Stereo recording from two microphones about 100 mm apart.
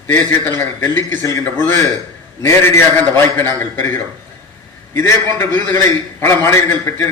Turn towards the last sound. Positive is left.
turn(degrees=25)  # may be behind; listen again after turning